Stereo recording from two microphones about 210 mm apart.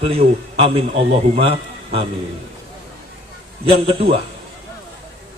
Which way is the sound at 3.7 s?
25° right (ahead or behind).